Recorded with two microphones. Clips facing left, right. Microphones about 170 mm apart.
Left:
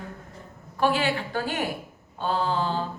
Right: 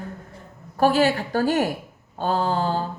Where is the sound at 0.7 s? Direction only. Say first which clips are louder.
Right 5 dB; 40° right (ahead or behind).